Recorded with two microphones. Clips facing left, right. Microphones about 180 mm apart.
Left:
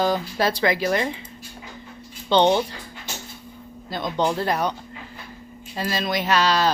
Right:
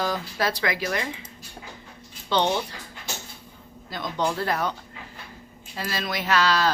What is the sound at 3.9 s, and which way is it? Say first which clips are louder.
Speech: left 4 dB; 20° left (ahead or behind).